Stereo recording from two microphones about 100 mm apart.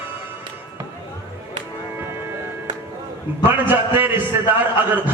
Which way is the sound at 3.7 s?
20° right (ahead or behind).